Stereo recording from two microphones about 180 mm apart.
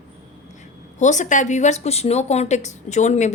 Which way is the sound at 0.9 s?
40° left (ahead or behind).